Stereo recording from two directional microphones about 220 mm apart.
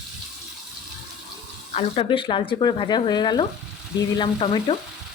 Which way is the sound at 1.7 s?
25° left (ahead or behind).